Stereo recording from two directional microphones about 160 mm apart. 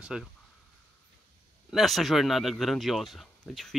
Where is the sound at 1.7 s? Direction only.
Centre (ahead or behind).